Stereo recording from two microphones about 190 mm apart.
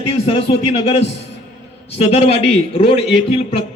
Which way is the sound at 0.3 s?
30° left (ahead or behind).